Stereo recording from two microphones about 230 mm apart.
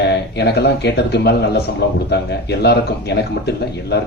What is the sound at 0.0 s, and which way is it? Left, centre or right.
Speech, left.